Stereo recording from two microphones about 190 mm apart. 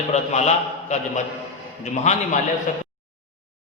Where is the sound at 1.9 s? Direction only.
35° left (ahead or behind).